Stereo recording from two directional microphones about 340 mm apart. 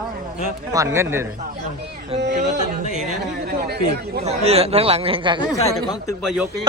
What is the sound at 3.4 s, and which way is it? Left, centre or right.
A man's voice, right.